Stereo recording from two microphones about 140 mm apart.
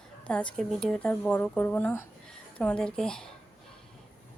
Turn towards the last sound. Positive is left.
turn(degrees=5)  # may be behind; listen again after turning